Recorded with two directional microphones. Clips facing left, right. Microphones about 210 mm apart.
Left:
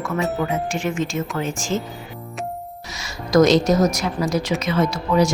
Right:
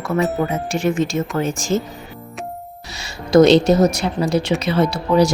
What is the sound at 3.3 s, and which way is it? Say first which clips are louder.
A woman's voice: right 4 dB; 30° right (ahead or behind).